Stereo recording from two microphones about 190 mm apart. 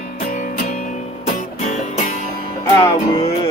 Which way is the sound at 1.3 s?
35° left (ahead or behind).